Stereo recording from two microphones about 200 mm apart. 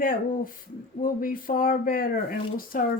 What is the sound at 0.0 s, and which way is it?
Speech, 45° left (ahead or behind).